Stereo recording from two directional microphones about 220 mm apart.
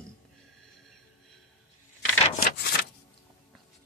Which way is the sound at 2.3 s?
45° left (ahead or behind).